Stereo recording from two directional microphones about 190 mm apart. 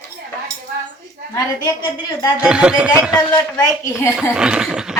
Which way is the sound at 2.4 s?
5° right (ahead or behind).